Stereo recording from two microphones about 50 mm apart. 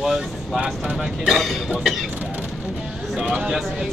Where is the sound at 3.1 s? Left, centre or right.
Right.